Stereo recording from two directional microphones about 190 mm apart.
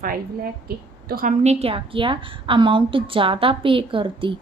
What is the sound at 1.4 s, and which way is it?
A woman's voice, 30° right (ahead or behind).